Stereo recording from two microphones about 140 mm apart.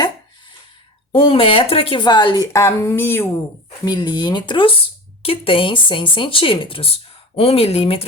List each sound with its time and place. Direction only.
1.1 s speech: 40° left (ahead or behind); by 3.4 s 15° left (ahead or behind)
3.8 s speech: 30° left (ahead or behind)